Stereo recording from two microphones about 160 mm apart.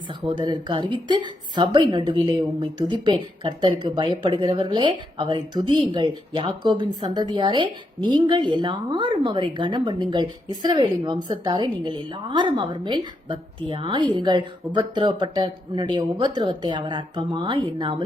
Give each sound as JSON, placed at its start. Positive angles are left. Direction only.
{"t": 0.3, "sound": "a woman's voice", "side_deg": -30}